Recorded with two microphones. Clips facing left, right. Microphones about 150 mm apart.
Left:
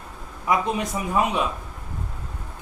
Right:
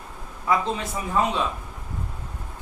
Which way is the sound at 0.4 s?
15° left (ahead or behind).